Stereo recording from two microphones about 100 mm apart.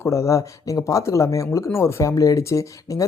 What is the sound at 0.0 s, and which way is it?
Speech, 30° left (ahead or behind).